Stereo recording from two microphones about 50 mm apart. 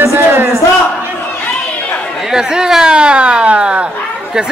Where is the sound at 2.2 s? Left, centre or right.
Centre.